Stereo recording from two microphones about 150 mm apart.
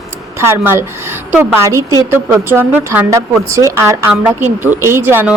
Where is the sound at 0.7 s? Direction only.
15° right (ahead or behind).